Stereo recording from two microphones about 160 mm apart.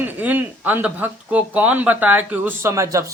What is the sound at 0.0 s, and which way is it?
Speech, 10° right (ahead or behind).